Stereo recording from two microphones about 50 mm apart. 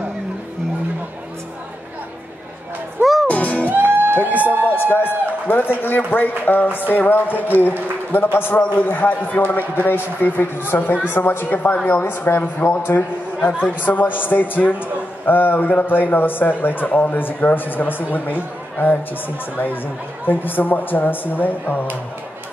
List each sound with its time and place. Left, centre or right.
3.0 s music: centre
3.3 s music: left
3.7 s music: right
4.6 s a man's voice: left